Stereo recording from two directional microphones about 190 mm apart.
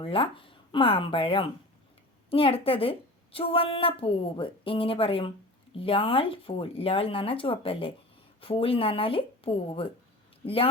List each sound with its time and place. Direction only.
0.0 s speech: 30° left (ahead or behind)